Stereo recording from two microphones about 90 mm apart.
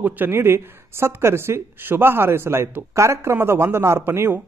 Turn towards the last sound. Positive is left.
turn(degrees=-25)  # may be behind; listen again after turning